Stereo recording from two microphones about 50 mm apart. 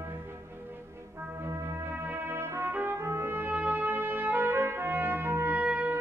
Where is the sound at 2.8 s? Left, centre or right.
Right.